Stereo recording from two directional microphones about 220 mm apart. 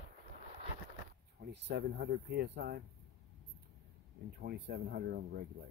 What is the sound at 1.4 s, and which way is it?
Speech, 50° right (ahead or behind).